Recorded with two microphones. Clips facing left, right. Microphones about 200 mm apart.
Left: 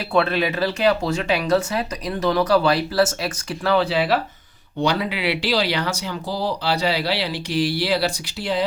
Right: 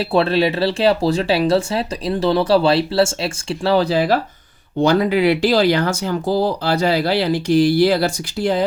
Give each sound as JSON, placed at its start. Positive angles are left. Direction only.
{"t": 0.0, "sound": "speech", "side_deg": -30}